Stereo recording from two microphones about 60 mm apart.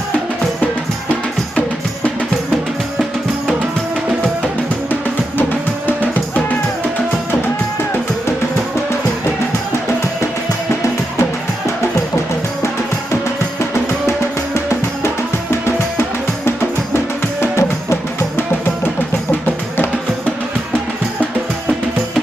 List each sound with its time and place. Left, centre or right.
5.9 s music: left
16.0 s music: left